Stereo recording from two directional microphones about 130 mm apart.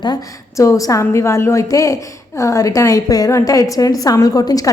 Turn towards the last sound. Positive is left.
turn(degrees=30)  # may be behind; listen again after turning